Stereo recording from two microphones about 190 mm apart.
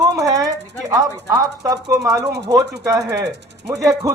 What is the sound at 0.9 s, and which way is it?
Speech, 20° right (ahead or behind).